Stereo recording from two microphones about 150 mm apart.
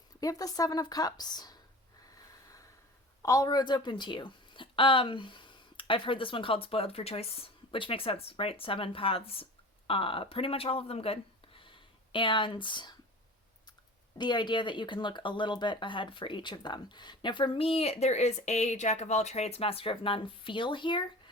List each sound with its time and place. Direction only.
0.2 s speech: 25° left (ahead or behind)
3.2 s a woman's voice: 25° left (ahead or behind)
14.2 s speech: 30° left (ahead or behind)